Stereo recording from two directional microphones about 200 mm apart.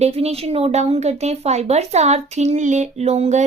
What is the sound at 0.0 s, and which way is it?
A woman's voice, 30° right (ahead or behind).